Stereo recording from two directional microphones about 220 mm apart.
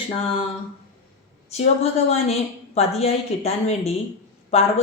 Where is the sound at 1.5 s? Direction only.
30° left (ahead or behind).